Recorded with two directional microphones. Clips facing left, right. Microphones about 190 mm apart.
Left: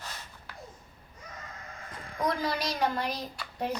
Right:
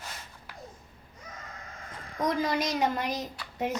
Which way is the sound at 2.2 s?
20° right (ahead or behind).